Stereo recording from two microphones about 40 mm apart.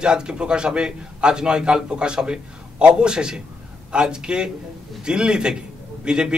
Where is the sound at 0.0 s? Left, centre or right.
Right.